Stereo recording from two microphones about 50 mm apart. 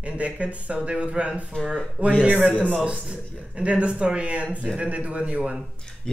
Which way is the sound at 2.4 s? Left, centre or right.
Centre.